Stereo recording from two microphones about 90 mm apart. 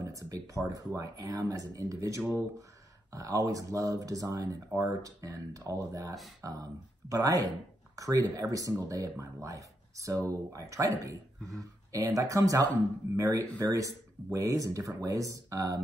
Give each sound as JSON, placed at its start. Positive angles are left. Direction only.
{"t": 0.0, "sound": "speech", "side_deg": -40}